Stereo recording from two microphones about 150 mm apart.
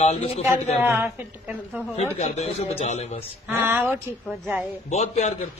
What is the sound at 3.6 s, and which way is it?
Speech, 15° right (ahead or behind).